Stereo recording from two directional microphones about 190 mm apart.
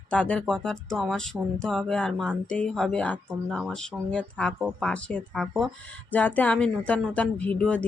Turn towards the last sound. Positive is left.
turn(degrees=5)  # may be behind; listen again after turning